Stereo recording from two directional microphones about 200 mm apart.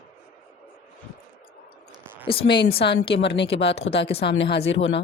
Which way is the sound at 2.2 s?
25° left (ahead or behind).